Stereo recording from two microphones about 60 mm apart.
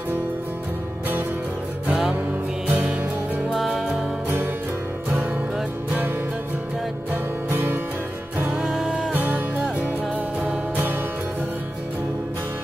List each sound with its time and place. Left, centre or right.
1.9 s music: centre
3.5 s music: centre
5.1 s music: right
7.1 s music: right
8.5 s music: centre
9.1 s music: right